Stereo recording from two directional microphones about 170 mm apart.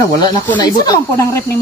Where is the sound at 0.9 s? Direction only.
20° left (ahead or behind).